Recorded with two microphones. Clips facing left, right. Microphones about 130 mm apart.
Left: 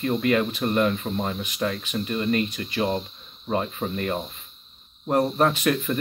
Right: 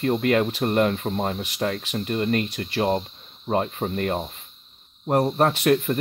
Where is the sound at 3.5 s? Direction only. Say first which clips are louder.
Right 2 dB; 50° right (ahead or behind).